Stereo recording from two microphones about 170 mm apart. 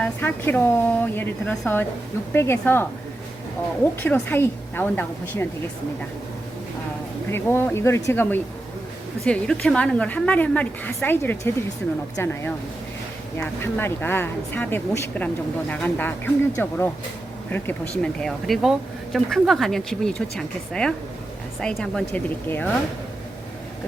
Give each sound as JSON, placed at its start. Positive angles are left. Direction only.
{"t": 0.0, "sound": "a woman's voice", "side_deg": 10}
{"t": 4.0, "sound": "a woman's voice", "side_deg": 10}
{"t": 7.3, "sound": "a woman's voice", "side_deg": 15}